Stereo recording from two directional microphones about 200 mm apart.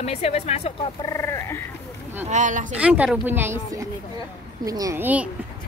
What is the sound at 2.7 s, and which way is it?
Speech, 5° right (ahead or behind).